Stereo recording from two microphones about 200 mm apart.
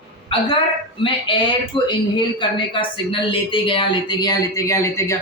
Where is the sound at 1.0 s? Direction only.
25° left (ahead or behind).